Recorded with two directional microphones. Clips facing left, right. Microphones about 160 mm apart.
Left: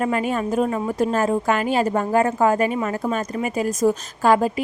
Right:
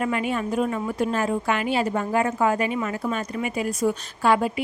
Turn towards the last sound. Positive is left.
turn(degrees=40)  # may be behind; listen again after turning